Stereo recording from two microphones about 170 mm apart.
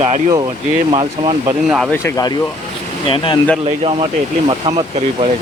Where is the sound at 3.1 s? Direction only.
30° left (ahead or behind).